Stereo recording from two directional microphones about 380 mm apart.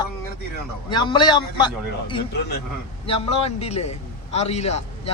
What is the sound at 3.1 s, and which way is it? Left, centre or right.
A man's voice, centre.